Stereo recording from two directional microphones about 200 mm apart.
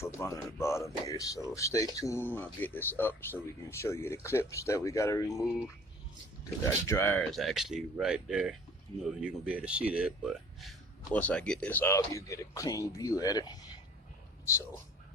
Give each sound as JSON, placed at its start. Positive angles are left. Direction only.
{"t": 0.0, "sound": "speech", "side_deg": 15}
{"t": 6.8, "sound": "speech", "side_deg": 10}